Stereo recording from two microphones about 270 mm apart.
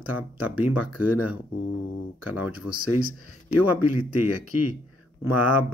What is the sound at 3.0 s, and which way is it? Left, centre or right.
Speech, right.